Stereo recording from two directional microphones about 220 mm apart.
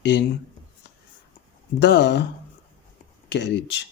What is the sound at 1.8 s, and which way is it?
Speech, 50° left (ahead or behind).